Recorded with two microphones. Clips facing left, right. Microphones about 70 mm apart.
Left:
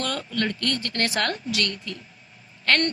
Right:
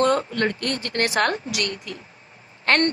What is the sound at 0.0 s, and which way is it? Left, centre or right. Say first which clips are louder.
A woman's voice: right 7 dB; right.